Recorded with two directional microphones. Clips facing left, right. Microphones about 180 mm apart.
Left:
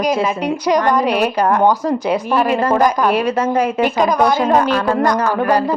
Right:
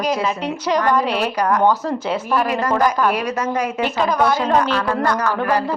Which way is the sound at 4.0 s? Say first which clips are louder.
Left 2 dB; 15° left (ahead or behind).